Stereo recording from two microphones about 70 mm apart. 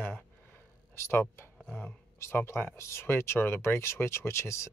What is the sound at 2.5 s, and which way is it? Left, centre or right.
Speech, left.